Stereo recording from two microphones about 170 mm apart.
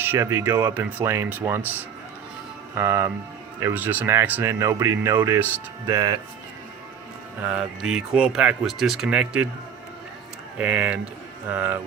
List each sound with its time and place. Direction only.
0.0 s speech: 15° right (ahead or behind)
2.7 s speech: 15° right (ahead or behind)
7.4 s speech: 5° right (ahead or behind)
10.6 s speech: 10° right (ahead or behind)